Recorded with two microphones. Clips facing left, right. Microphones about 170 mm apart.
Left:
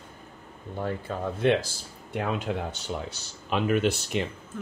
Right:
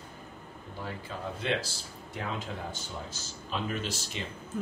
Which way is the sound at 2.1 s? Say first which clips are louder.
Left 8 dB; 65° left (ahead or behind).